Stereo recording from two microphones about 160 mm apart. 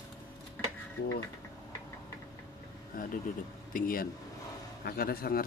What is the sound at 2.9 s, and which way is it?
A man's voice, 60° left (ahead or behind).